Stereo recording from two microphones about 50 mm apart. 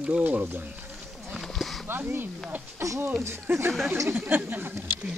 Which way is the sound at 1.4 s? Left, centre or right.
Centre.